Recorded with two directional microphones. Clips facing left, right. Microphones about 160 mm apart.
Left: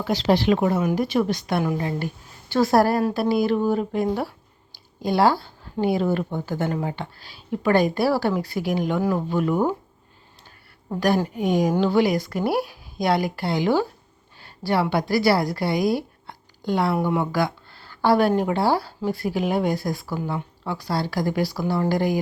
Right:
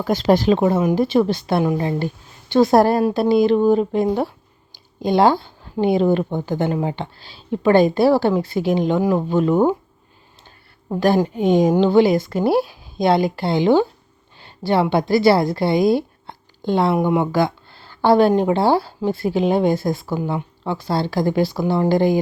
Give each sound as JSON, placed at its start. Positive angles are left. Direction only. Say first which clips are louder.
{"t": 0.0, "sound": "speech", "louder": "right 4 dB", "side_deg": -50}
{"t": 0.5, "sound": "speech", "louder": "right 4 dB", "side_deg": -25}
{"t": 10.8, "sound": "a woman's voice", "louder": "right 4 dB", "side_deg": -25}